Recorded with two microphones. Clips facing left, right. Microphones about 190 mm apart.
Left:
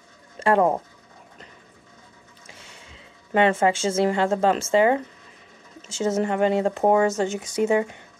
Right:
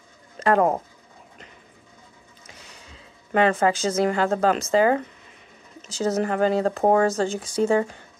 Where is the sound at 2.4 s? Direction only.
30° left (ahead or behind).